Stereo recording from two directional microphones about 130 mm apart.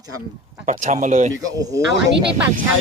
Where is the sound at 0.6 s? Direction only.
70° right (ahead or behind).